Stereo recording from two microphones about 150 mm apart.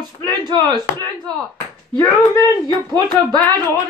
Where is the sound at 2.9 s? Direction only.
25° right (ahead or behind).